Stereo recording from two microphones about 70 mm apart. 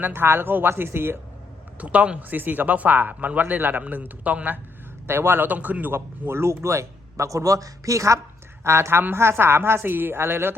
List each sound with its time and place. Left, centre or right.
0.0 s speech: right
1.8 s speech: centre